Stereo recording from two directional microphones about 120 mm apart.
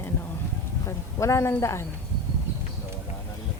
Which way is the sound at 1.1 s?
25° left (ahead or behind).